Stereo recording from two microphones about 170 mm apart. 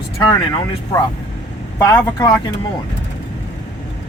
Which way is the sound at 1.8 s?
15° left (ahead or behind).